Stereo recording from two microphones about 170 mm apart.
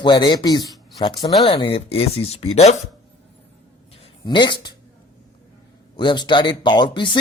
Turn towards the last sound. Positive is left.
turn(degrees=30)  # may be behind; listen again after turning